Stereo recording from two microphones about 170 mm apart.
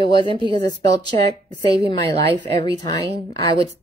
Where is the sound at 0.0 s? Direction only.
30° left (ahead or behind).